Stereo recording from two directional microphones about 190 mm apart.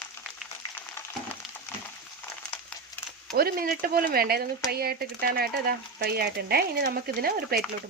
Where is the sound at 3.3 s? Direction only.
50° right (ahead or behind).